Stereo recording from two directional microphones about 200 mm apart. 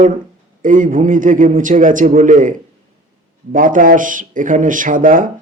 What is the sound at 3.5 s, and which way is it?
A man's voice, 40° right (ahead or behind).